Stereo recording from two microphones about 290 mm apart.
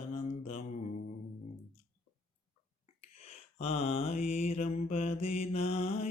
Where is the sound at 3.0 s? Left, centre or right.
Left.